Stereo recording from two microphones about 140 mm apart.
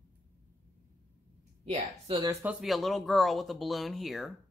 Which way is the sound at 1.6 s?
50° right (ahead or behind).